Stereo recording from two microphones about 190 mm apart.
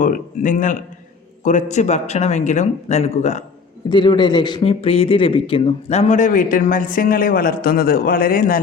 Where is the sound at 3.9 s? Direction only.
25° left (ahead or behind).